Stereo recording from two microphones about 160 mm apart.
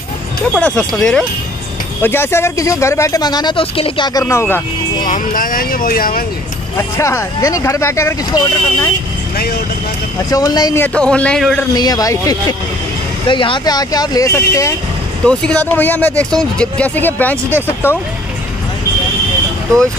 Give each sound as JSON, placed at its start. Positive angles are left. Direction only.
{"t": 0.6, "sound": "speech", "side_deg": 5}
{"t": 5.0, "sound": "speech", "side_deg": 55}
{"t": 7.0, "sound": "speech", "side_deg": 20}
{"t": 10.3, "sound": "speech", "side_deg": 25}
{"t": 10.8, "sound": "speech", "side_deg": 5}
{"t": 11.7, "sound": "speech", "side_deg": 25}
{"t": 15.2, "sound": "speech", "side_deg": 5}